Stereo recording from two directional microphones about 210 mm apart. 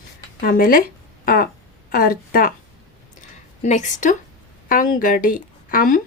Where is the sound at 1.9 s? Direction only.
45° left (ahead or behind).